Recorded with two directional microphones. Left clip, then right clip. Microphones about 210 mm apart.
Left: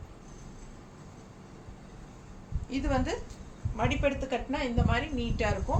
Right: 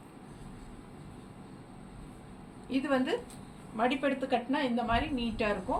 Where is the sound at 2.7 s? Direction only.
20° left (ahead or behind).